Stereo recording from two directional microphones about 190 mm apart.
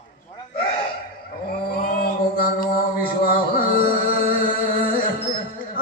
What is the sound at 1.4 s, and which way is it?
Mantra, 50° left (ahead or behind).